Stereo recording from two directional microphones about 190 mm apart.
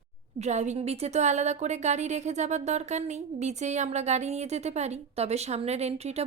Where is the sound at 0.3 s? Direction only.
35° right (ahead or behind).